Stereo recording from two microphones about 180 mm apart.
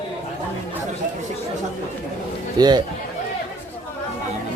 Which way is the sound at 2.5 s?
20° right (ahead or behind).